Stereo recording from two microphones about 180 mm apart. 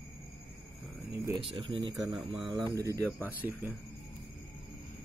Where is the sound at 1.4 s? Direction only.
30° right (ahead or behind); by 3.7 s 10° right (ahead or behind).